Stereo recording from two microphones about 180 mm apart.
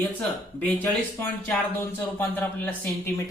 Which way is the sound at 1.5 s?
10° left (ahead or behind).